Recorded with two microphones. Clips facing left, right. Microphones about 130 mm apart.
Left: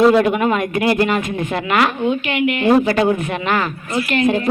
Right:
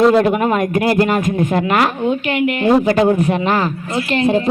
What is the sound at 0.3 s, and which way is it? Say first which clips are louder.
Speech: right 2 dB; 40° right (ahead or behind).